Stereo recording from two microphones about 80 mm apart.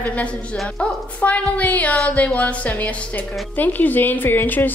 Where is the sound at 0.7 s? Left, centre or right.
Centre.